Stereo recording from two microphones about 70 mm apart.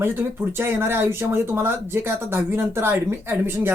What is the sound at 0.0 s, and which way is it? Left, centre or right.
Speech, right.